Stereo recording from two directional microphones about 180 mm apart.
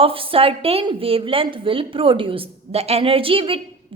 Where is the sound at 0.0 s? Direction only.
30° right (ahead or behind).